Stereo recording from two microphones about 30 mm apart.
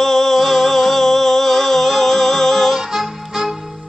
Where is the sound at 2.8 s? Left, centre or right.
Centre.